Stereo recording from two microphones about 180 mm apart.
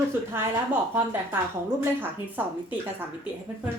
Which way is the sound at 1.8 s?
10° right (ahead or behind).